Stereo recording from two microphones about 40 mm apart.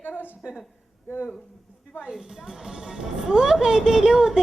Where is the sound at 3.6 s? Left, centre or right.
Centre.